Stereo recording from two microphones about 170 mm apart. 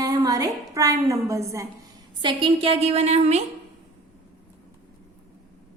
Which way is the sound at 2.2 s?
30° right (ahead or behind).